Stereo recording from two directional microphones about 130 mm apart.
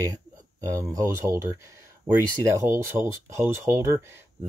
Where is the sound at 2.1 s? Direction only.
40° right (ahead or behind).